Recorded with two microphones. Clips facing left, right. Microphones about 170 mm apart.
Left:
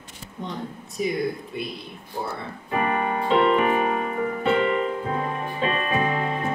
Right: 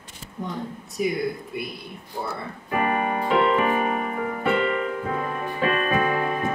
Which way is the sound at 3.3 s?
25° left (ahead or behind).